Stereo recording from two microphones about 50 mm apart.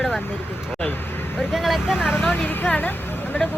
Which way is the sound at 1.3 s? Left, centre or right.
Centre.